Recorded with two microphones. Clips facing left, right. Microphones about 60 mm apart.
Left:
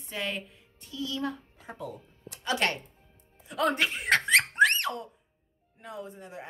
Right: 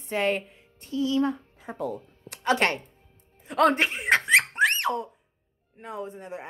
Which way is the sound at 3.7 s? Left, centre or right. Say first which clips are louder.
Right 3 dB; right.